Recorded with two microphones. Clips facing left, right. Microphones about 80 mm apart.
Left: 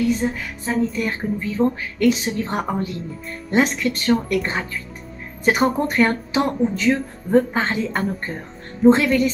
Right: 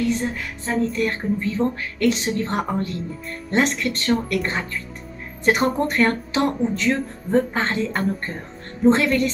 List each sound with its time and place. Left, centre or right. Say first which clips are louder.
0.2 s music: left 3 dB; centre